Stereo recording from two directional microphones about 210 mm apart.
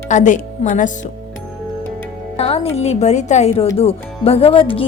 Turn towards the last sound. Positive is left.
turn(degrees=25)  # may be behind; listen again after turning